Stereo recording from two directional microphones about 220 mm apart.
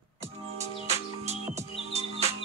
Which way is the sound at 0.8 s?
30° right (ahead or behind).